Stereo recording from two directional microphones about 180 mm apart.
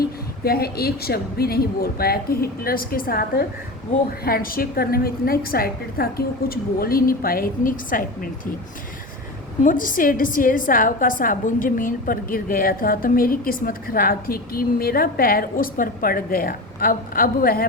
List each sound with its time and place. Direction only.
0.4 s a woman's voice: 60° left (ahead or behind)
9.6 s a woman's voice: 50° left (ahead or behind)